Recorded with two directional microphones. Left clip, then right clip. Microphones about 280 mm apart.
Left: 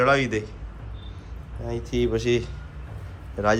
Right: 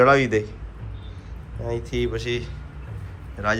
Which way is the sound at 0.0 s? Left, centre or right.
Centre.